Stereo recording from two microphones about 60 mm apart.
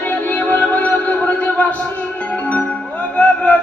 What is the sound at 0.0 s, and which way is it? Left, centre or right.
Music, left.